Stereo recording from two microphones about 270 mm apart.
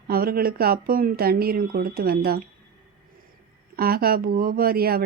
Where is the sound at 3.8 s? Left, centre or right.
Right.